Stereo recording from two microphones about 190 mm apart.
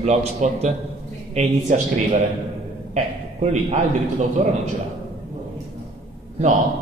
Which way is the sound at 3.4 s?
35° right (ahead or behind).